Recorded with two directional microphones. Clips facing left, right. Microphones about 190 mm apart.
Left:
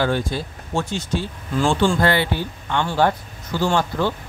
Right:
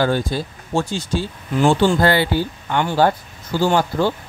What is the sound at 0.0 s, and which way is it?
Speech, 35° right (ahead or behind).